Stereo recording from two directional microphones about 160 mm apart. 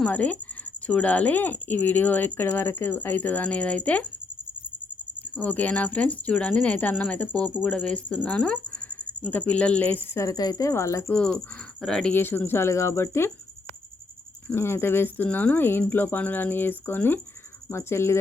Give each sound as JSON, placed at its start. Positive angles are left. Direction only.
{"t": 0.0, "sound": "speech", "side_deg": 10}
{"t": 5.4, "sound": "speech", "side_deg": 10}
{"t": 11.1, "sound": "speech", "side_deg": 5}
{"t": 12.1, "sound": "speech", "side_deg": 15}
{"t": 14.4, "sound": "speech", "side_deg": 15}